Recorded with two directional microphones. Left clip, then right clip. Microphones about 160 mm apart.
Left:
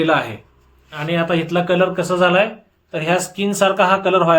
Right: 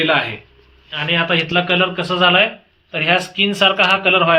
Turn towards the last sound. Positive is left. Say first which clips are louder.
# right 1 dB
turn(degrees=55)  # may be behind; listen again after turning